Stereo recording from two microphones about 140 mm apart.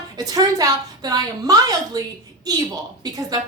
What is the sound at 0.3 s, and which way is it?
A child's voice, 30° right (ahead or behind).